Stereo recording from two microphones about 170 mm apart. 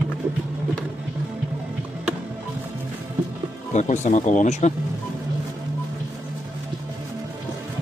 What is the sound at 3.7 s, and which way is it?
Speech, 45° left (ahead or behind).